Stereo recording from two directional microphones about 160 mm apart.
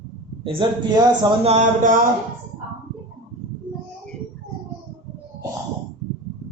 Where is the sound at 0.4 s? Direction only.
30° right (ahead or behind).